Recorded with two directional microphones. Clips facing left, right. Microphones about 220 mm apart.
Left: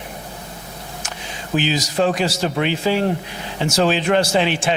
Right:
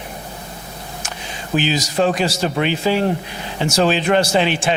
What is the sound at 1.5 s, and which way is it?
A man's voice, 20° right (ahead or behind).